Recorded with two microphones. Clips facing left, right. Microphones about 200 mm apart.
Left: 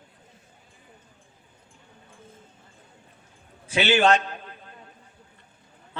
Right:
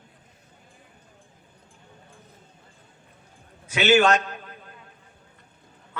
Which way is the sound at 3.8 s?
45° right (ahead or behind).